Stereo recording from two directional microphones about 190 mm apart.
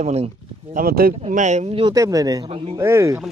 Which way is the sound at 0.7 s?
50° right (ahead or behind).